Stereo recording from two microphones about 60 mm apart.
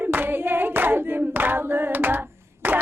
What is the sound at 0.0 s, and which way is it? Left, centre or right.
Hands, right.